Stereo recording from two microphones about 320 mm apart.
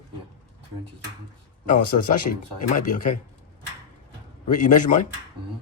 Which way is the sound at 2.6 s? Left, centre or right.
Left.